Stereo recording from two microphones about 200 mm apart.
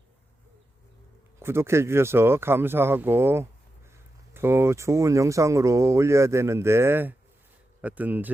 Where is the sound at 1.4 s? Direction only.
15° right (ahead or behind).